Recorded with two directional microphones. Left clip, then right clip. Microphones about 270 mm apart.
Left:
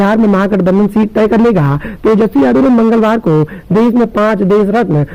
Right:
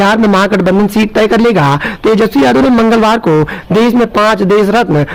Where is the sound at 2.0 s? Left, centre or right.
Right.